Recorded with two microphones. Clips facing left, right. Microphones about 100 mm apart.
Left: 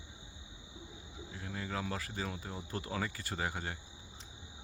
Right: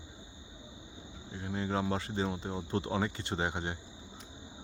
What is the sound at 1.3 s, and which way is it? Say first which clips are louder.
Speech: right 7 dB; 25° right (ahead or behind).